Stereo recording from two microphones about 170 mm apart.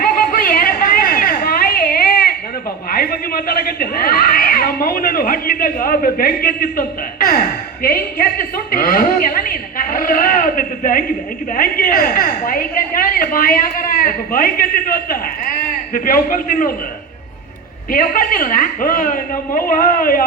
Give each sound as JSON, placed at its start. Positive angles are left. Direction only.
{"t": 0.0, "sound": "a sound", "side_deg": 55}
{"t": 2.9, "sound": "a woman's voice", "side_deg": 60}
{"t": 17.9, "sound": "a woman's voice", "side_deg": 55}